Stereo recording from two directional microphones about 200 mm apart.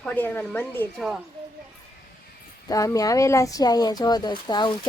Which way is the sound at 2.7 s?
15° left (ahead or behind).